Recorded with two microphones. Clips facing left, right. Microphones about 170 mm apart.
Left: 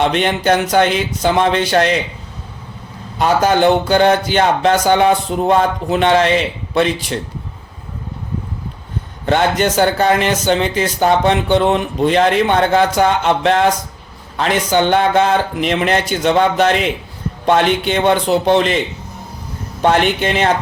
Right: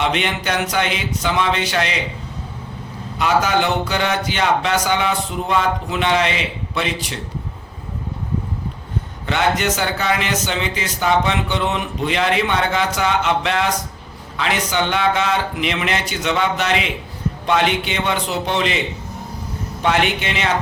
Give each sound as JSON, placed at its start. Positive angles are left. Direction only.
{"t": 0.0, "sound": "speech", "side_deg": 45}
{"t": 3.2, "sound": "speech", "side_deg": 40}
{"t": 9.2, "sound": "speech", "side_deg": 35}
{"t": 10.0, "sound": "a man's voice", "side_deg": 45}
{"t": 20.2, "sound": "speech", "side_deg": 45}